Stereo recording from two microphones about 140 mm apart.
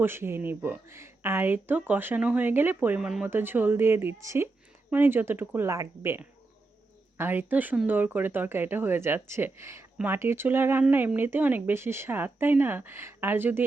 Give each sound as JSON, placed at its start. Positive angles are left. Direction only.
{"t": 0.0, "sound": "speech", "side_deg": -15}